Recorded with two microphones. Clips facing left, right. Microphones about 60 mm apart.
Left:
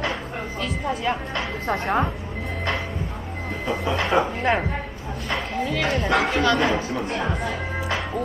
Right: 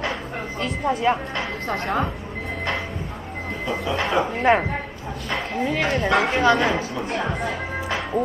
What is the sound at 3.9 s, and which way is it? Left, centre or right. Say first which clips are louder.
Speech: even; centre.